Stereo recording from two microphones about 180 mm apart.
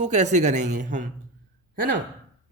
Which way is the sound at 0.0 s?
40° right (ahead or behind).